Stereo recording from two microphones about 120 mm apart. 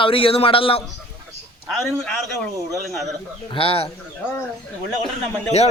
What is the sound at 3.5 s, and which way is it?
Speech, 50° left (ahead or behind).